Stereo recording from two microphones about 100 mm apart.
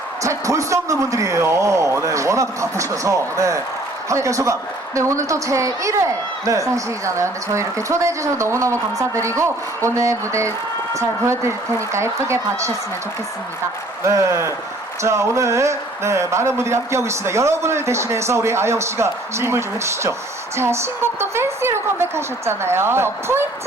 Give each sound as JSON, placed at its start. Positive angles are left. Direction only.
{"t": 0.2, "sound": "a man's voice", "side_deg": -30}
{"t": 14.0, "sound": "speech", "side_deg": -30}